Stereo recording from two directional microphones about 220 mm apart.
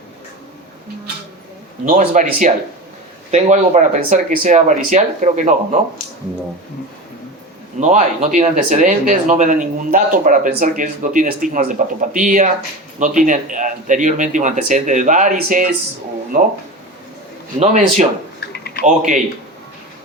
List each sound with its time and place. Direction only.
1.8 s speech: 35° right (ahead or behind)
7.8 s speech: 35° right (ahead or behind)
17.6 s speech: 30° right (ahead or behind)
18.3 s typing: 45° left (ahead or behind)
18.8 s speech: 35° right (ahead or behind)